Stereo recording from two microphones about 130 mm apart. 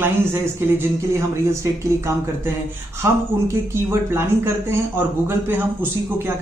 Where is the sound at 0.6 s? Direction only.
20° right (ahead or behind).